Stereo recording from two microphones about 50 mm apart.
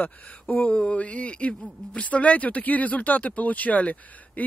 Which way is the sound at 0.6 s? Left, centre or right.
Centre.